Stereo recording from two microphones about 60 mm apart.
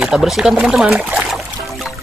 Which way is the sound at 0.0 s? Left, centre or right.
Centre.